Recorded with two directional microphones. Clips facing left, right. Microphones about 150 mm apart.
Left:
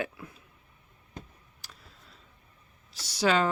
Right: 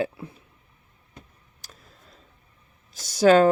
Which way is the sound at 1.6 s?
45° right (ahead or behind).